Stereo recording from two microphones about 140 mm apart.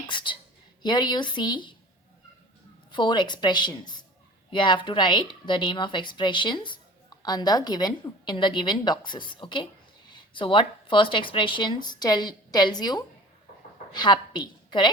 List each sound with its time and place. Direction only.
0.1 s a woman's voice: 35° left (ahead or behind)
2.9 s a woman's voice: 35° left (ahead or behind)